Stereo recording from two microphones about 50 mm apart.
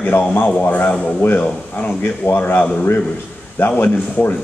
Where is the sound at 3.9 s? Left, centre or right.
Left.